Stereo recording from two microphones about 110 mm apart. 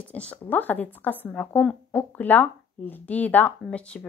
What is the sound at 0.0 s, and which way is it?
Speech, 10° left (ahead or behind).